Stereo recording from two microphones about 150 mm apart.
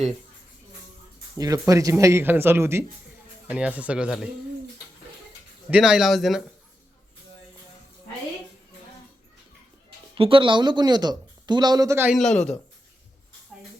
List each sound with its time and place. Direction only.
1.4 s speech: 25° right (ahead or behind); by 4.3 s 5° right (ahead or behind)
5.7 s speech: 5° right (ahead or behind)
10.2 s speech: 35° right (ahead or behind); by 12.1 s 15° right (ahead or behind)
12.1 s speech: 5° left (ahead or behind)
13.5 s a sound: centre (ahead or behind)